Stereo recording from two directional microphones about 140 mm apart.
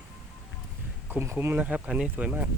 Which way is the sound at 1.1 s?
15° right (ahead or behind).